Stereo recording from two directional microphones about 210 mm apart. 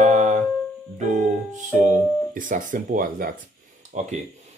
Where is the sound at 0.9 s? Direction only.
35° right (ahead or behind).